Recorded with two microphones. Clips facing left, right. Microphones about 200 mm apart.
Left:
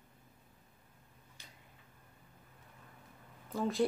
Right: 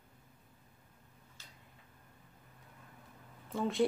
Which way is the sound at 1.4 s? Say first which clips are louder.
Left 2 dB; 15° left (ahead or behind).